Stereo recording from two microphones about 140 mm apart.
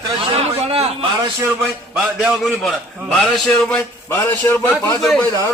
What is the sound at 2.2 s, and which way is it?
Speech, centre (ahead or behind).